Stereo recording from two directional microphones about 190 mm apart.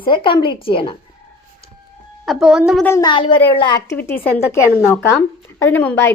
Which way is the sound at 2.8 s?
15° left (ahead or behind).